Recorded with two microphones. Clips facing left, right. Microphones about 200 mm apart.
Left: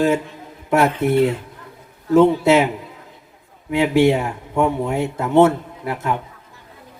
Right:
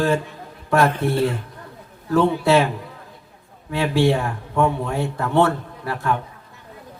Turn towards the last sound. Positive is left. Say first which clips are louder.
# left 1 dB
turn(degrees=20)  # may be behind; listen again after turning